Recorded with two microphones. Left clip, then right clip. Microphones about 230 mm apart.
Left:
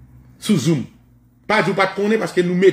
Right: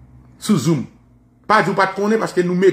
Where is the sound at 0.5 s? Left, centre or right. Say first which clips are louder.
Even; centre.